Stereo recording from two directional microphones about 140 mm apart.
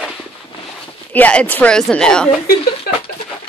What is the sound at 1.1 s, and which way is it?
A woman's voice, 10° left (ahead or behind).